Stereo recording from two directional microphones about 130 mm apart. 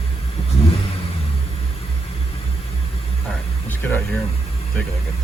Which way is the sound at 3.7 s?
15° left (ahead or behind).